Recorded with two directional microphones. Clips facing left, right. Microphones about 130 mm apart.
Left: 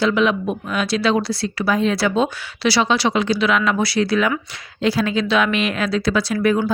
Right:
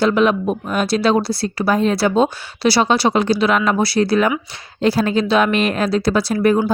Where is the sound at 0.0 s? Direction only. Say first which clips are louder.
Right 3 dB; 45° right (ahead or behind).